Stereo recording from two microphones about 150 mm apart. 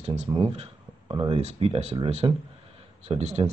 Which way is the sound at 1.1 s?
30° right (ahead or behind).